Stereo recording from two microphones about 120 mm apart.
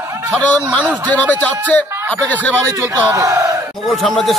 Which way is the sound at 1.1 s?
15° left (ahead or behind).